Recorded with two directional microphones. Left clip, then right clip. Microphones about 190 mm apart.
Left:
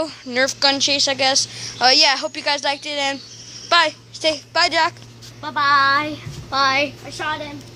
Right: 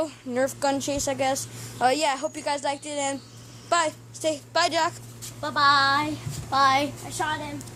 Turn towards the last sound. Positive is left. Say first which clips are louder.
# left 4 dB
turn(degrees=-20)  # may be behind; listen again after turning